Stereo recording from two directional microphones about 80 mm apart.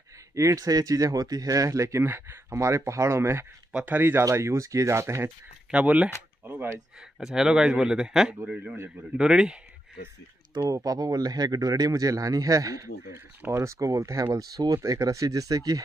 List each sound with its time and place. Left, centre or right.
0.3 s speech: right
3.7 s speech: right
4.3 s speech: right
5.7 s speech: centre
7.2 s speech: centre
10.7 s a man's voice: right
14.3 s a man's voice: right